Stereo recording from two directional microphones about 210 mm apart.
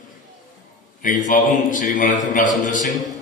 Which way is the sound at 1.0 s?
40° left (ahead or behind).